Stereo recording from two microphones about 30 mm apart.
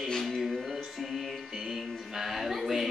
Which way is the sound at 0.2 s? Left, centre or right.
Centre.